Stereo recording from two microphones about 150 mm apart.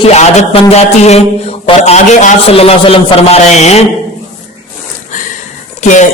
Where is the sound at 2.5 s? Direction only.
40° left (ahead or behind).